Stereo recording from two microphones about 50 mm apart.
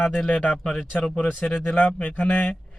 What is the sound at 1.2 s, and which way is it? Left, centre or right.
Speech, left.